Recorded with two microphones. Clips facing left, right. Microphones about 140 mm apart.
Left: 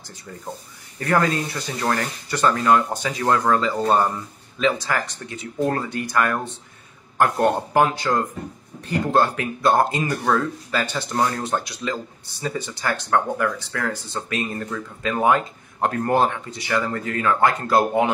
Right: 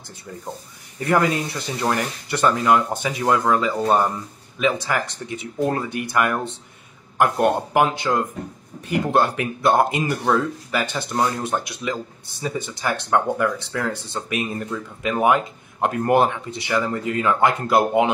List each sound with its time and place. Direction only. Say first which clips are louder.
0.9 s speech: right 1 dB; 15° right (ahead or behind)